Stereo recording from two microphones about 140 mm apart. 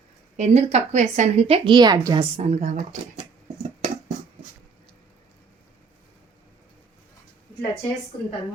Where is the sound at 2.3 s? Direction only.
55° right (ahead or behind).